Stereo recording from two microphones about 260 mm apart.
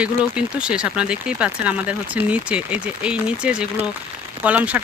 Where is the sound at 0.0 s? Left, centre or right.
Centre.